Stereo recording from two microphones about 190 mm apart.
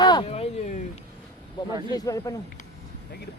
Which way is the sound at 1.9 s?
20° left (ahead or behind).